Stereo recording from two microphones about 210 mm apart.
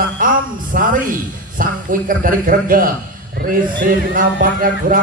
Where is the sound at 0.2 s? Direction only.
40° right (ahead or behind).